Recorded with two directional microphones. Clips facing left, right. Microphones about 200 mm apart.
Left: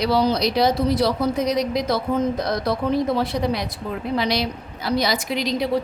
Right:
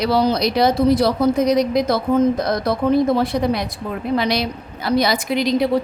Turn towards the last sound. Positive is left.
turn(degrees=-55)  # may be behind; listen again after turning